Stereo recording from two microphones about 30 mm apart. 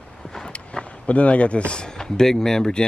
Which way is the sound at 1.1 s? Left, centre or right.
Left.